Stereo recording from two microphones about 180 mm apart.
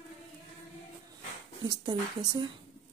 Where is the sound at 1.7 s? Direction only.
25° right (ahead or behind).